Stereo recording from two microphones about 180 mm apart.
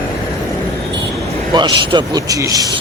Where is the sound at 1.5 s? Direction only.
25° right (ahead or behind).